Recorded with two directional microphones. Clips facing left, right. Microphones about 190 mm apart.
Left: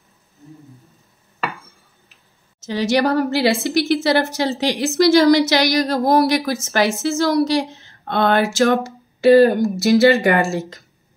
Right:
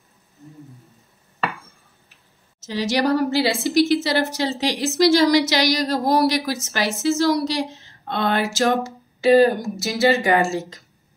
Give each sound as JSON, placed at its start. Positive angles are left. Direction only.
{"t": 2.6, "sound": "a woman's voice", "side_deg": 55}